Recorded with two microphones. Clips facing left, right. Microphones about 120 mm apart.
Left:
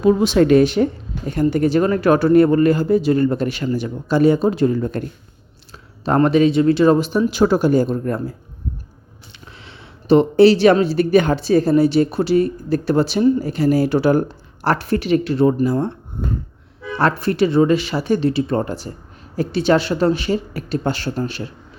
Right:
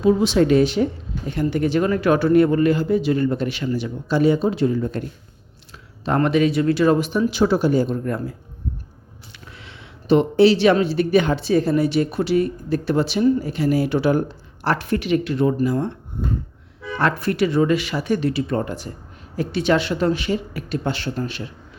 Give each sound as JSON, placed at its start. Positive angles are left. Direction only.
{"t": 0.0, "sound": "speech", "side_deg": 50}
{"t": 1.3, "sound": "speech", "side_deg": 40}
{"t": 6.1, "sound": "speech", "side_deg": 30}
{"t": 9.6, "sound": "speech", "side_deg": 35}
{"t": 17.0, "sound": "speech", "side_deg": 35}